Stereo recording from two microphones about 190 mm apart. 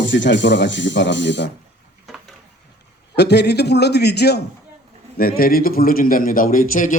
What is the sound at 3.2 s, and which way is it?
A man's voice, 60° left (ahead or behind).